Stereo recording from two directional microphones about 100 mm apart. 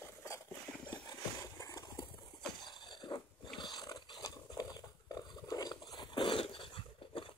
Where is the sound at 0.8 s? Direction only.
50° left (ahead or behind).